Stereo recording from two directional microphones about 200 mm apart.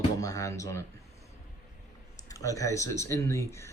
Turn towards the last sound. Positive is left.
turn(degrees=15)  # may be behind; listen again after turning